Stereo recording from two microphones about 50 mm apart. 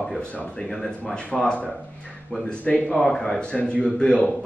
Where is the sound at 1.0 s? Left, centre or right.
Left.